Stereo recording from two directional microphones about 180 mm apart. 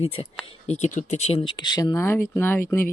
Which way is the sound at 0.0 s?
30° left (ahead or behind).